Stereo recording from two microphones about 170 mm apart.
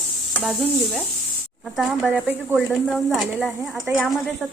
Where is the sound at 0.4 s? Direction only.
Centre (ahead or behind).